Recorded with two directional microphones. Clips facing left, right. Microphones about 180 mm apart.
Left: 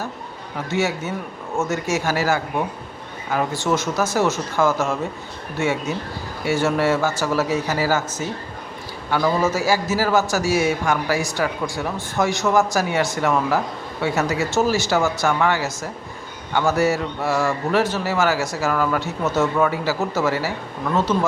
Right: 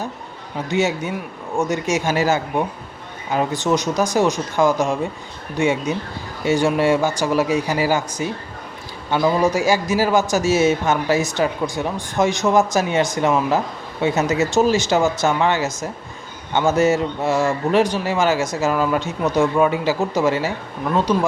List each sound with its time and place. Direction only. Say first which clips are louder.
0.7 s a man's voice: right 2 dB; 15° right (ahead or behind)